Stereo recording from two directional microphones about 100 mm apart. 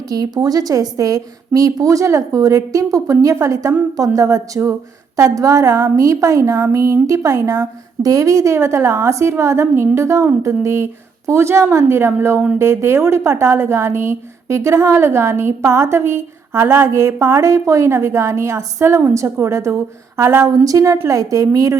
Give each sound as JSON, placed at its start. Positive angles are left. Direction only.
{"t": 0.1, "sound": "a woman's voice", "side_deg": -40}